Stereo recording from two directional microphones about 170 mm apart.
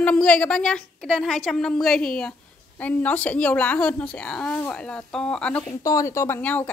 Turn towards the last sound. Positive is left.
turn(degrees=10)  # may be behind; listen again after turning